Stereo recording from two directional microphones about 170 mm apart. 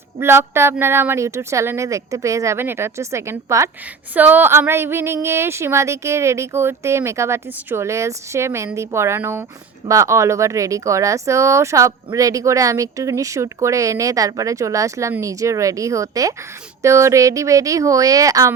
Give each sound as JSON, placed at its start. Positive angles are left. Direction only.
{"t": 0.2, "sound": "speech", "side_deg": -15}